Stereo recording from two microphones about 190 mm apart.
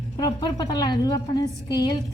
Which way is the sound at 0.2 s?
20° left (ahead or behind).